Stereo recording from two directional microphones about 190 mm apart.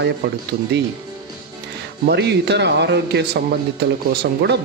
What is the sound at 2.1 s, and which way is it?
Speech, 65° right (ahead or behind).